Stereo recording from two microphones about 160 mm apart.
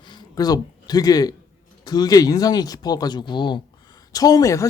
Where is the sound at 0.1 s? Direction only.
25° left (ahead or behind).